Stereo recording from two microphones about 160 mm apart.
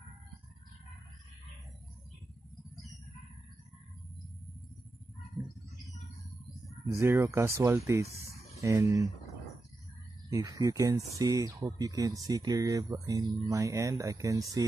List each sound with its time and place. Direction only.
7.0 s speech: 15° right (ahead or behind)
10.3 s speech: 20° right (ahead or behind)